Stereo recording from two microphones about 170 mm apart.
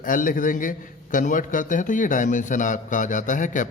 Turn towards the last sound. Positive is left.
turn(degrees=50)  # may be behind; listen again after turning